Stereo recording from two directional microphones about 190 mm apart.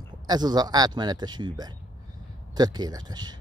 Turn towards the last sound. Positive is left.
turn(degrees=-20)  # may be behind; listen again after turning